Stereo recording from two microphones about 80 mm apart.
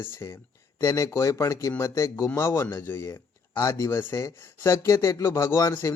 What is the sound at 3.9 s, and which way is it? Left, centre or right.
Speech, left.